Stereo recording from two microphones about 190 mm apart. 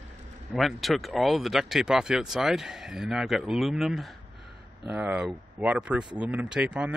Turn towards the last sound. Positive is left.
turn(degrees=-5)  # may be behind; listen again after turning